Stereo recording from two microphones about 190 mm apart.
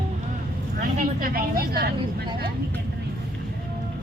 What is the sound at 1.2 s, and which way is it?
Speech, 50° right (ahead or behind).